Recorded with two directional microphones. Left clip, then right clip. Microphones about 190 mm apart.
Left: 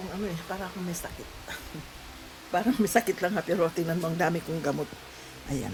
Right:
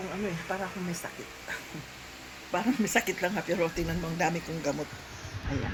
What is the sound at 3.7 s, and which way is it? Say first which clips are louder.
Speech: left 3 dB; 45° left (ahead or behind).